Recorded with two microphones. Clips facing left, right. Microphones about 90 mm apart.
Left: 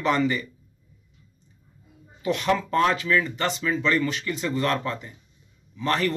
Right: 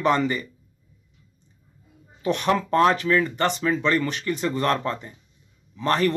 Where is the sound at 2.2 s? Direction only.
40° right (ahead or behind).